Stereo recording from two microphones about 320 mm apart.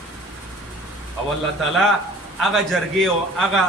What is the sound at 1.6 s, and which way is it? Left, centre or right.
A man's voice, centre.